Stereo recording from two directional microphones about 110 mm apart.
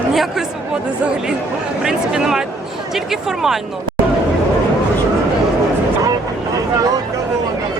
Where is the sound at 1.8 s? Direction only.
5° right (ahead or behind).